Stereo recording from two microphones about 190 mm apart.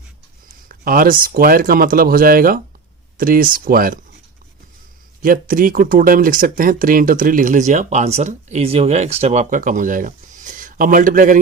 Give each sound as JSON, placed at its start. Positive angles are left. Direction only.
{"t": 0.4, "sound": "speech", "side_deg": -50}
{"t": 5.2, "sound": "speech", "side_deg": -45}